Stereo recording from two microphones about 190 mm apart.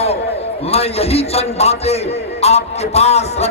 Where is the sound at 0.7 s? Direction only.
30° left (ahead or behind).